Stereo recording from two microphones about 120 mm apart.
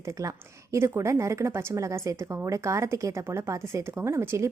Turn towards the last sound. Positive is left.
turn(degrees=-25)  # may be behind; listen again after turning